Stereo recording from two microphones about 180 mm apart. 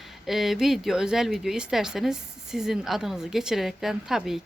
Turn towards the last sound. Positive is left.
turn(degrees=0)  # may be behind; listen again after turning